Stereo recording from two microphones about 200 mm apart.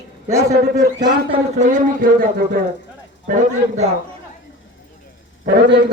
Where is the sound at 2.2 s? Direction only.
45° right (ahead or behind).